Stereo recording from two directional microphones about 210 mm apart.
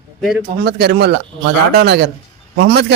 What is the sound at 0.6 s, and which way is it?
Speech, 50° right (ahead or behind).